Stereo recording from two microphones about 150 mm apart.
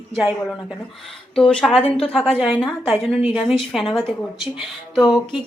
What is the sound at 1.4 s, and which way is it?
Speech, 5° left (ahead or behind).